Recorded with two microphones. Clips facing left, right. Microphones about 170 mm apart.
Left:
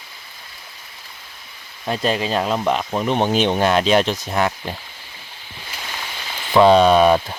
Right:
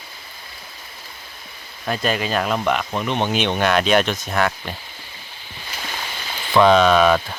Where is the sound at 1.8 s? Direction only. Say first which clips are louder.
Left 1 dB; 30° left (ahead or behind).